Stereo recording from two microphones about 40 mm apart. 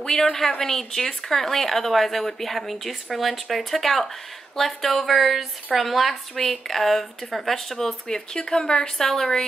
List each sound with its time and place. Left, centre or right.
0.0 s speech: centre
8.1 s speech: centre